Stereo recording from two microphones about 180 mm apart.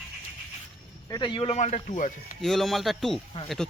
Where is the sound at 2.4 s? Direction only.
Centre (ahead or behind).